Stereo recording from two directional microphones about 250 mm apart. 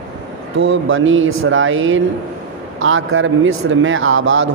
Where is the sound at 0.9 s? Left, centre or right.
Right.